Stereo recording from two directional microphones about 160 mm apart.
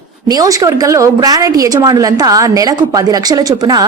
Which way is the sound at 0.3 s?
25° right (ahead or behind).